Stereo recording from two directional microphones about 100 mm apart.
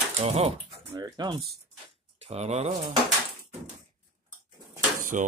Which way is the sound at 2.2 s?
90° right.